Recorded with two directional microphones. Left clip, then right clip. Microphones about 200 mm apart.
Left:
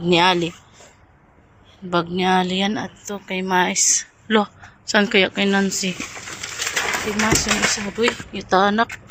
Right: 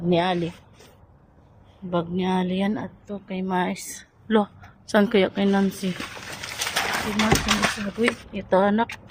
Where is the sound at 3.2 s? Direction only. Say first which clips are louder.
Left 7 dB; 10° left (ahead or behind).